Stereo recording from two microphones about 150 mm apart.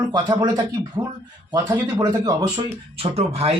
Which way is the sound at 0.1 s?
25° right (ahead or behind).